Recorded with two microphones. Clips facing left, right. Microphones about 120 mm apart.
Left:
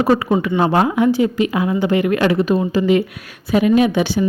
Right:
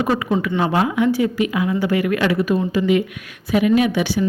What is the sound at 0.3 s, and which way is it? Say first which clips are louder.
Speech: left 3 dB; 20° left (ahead or behind).